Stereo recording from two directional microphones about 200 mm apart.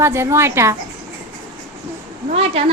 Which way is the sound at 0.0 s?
15° right (ahead or behind).